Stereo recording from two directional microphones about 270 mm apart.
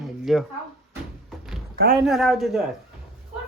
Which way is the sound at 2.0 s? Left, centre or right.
Centre.